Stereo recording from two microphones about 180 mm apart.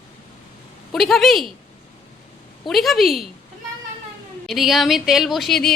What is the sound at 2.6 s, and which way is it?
Speech, centre (ahead or behind).